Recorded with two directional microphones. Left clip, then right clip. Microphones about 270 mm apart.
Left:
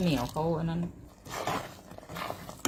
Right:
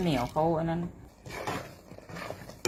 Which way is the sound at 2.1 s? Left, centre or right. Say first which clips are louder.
Left 3 dB; centre.